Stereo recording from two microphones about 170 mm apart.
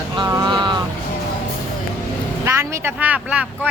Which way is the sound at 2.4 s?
15° right (ahead or behind).